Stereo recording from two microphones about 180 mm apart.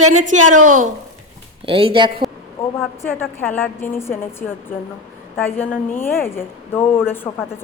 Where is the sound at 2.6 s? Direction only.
15° left (ahead or behind).